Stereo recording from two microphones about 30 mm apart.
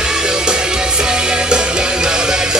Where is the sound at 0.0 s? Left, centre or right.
Right.